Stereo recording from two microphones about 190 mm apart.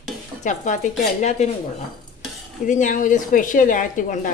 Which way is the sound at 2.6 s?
40° left (ahead or behind).